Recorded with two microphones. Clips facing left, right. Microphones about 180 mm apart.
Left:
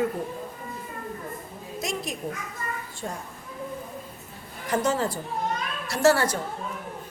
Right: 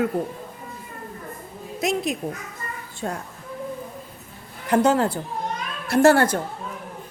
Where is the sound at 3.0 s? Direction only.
65° right (ahead or behind).